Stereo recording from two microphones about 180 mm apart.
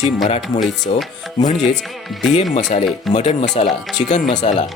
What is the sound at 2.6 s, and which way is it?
Speech, 40° left (ahead or behind).